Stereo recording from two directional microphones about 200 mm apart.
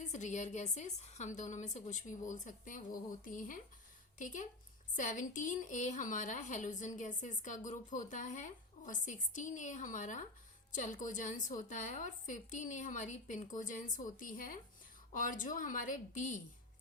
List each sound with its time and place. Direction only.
0.0 s a woman's voice: 35° left (ahead or behind)